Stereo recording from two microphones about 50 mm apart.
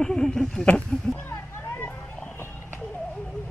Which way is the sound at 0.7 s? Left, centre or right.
Left.